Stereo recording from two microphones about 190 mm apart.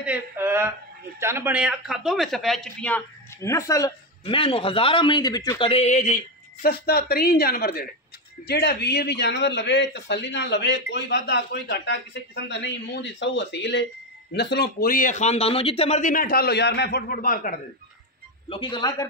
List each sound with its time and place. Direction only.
0.0 s speech: 10° right (ahead or behind)
3.4 s speech: 15° left (ahead or behind)
4.2 s a man's voice: 30° left (ahead or behind); by 17.6 s 50° left (ahead or behind)
18.5 s a woman's voice: 25° left (ahead or behind)